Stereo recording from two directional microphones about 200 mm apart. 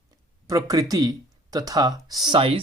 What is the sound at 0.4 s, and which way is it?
Speech, 15° right (ahead or behind).